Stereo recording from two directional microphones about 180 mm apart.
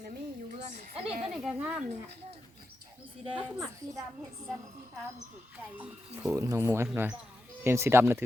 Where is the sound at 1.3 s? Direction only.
5° right (ahead or behind).